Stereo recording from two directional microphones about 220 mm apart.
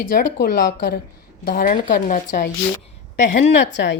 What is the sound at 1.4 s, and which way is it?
Speech, 35° left (ahead or behind).